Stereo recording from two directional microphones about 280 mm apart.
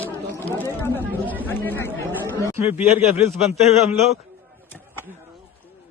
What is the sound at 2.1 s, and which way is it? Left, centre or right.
Speech, centre.